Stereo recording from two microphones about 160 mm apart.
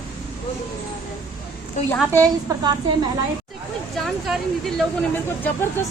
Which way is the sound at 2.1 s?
20° right (ahead or behind).